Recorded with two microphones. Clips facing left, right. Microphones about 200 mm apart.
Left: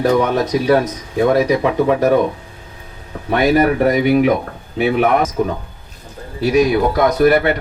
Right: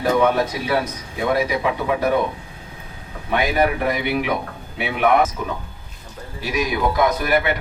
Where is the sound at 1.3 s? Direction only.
45° left (ahead or behind).